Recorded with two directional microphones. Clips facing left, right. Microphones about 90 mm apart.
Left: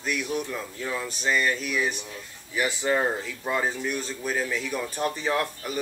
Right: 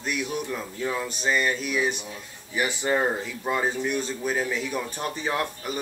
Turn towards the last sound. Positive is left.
turn(degrees=-15)  # may be behind; listen again after turning